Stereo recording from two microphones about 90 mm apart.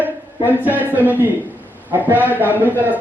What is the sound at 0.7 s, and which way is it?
Speech, 20° right (ahead or behind).